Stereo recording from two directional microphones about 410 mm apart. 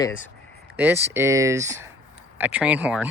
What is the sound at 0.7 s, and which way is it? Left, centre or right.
Speech, centre.